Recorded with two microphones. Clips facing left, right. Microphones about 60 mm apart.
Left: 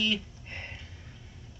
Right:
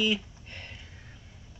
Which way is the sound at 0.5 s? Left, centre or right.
Left.